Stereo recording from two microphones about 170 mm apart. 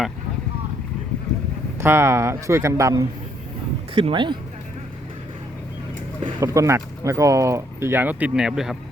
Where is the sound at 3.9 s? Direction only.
30° right (ahead or behind).